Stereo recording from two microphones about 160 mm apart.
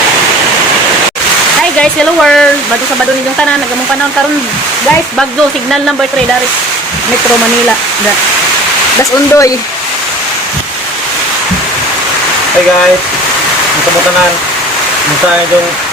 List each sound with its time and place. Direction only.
1.8 s speech: 5° left (ahead or behind)
9.0 s speech: 20° left (ahead or behind)